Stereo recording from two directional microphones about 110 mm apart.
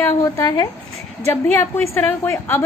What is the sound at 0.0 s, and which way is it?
A woman's voice, 25° left (ahead or behind).